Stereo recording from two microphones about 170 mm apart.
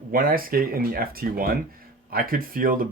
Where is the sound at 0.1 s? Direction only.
55° right (ahead or behind).